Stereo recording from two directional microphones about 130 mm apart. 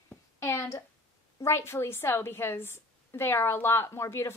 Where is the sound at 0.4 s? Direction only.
20° left (ahead or behind).